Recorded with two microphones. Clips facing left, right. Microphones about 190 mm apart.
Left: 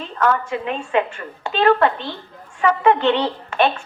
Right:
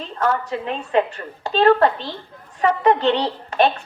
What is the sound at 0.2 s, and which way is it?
A woman's voice, 35° right (ahead or behind).